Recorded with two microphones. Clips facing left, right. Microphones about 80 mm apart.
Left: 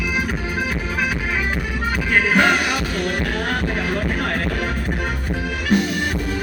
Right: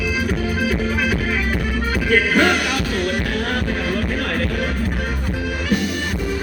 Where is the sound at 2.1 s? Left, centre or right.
Centre.